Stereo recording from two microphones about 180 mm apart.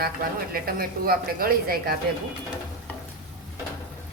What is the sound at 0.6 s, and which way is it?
Speech, 55° right (ahead or behind).